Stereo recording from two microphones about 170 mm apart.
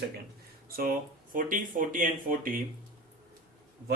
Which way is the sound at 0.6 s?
55° right (ahead or behind).